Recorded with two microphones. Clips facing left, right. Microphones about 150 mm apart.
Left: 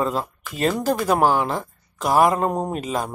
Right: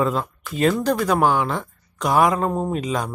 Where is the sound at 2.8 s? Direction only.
5° left (ahead or behind).